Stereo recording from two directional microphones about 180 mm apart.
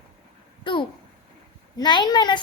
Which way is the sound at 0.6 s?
30° left (ahead or behind).